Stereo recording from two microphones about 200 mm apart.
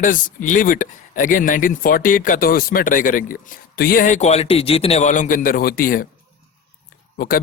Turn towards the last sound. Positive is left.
turn(degrees=45)  # may be behind; listen again after turning